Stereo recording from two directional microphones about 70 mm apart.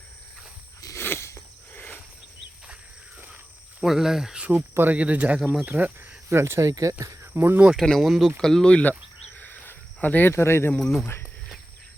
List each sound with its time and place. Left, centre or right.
0.9 s a sound: left
1.7 s insect: left
3.8 s speech: centre
4.4 s speech: right
4.9 s speech: right
6.2 s speech: right
7.3 s speech: right
7.8 s speech: centre
8.4 s speech: centre
9.3 s cricket: left
10.8 s speech: centre
11.0 s speech: left